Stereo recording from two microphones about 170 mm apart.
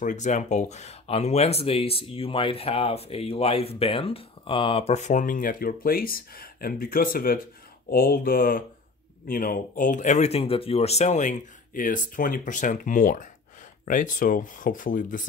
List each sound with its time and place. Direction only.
0.0 s speech: 45° left (ahead or behind)
7.9 s mantra: 60° left (ahead or behind)
9.3 s speech: 55° left (ahead or behind)